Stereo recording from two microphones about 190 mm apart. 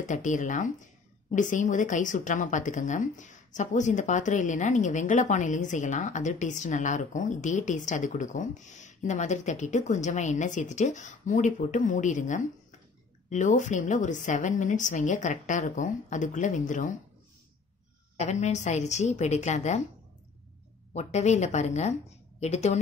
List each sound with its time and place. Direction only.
0.0 s speech: 40° left (ahead or behind)
18.2 s speech: 35° left (ahead or behind)
20.9 s speech: 35° left (ahead or behind)